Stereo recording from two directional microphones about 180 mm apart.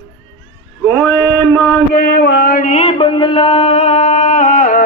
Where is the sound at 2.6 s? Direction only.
40° left (ahead or behind).